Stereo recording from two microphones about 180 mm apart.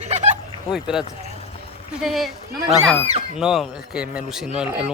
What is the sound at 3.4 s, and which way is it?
Speech, 5° right (ahead or behind).